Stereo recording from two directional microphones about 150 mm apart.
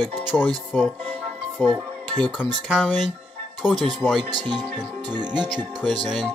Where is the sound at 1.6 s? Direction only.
10° left (ahead or behind).